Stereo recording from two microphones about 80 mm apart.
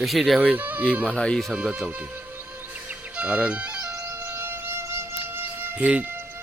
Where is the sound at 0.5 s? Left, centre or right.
Right.